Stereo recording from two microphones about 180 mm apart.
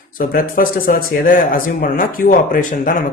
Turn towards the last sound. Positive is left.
turn(degrees=50)  # may be behind; listen again after turning